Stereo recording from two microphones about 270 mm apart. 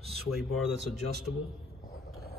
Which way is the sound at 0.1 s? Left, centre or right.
Centre.